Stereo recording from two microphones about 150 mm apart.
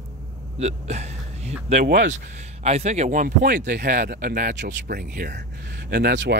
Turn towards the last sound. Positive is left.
turn(degrees=-90)